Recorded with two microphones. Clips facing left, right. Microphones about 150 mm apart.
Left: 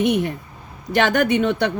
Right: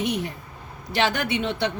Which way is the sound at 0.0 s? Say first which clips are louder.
Left 7 dB; 55° left (ahead or behind).